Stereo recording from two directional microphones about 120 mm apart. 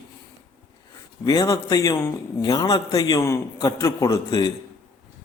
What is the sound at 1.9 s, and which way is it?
Speech, 20° left (ahead or behind).